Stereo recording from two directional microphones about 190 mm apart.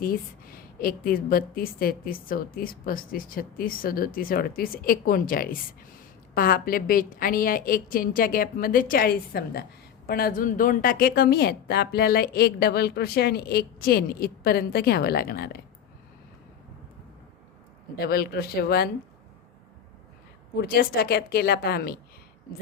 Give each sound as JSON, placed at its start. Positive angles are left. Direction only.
{"t": 0.0, "sound": "a woman's voice", "side_deg": 50}
{"t": 17.9, "sound": "a woman's voice", "side_deg": 55}
{"t": 20.6, "sound": "a woman's voice", "side_deg": 55}